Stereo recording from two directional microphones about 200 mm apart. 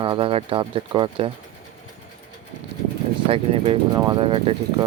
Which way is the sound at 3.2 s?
30° right (ahead or behind).